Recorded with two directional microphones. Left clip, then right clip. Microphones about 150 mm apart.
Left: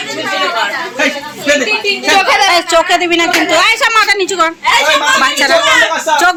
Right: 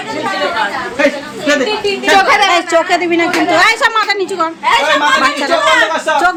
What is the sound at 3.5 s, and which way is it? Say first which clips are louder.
Speech: right 2 dB; 30° right (ahead or behind).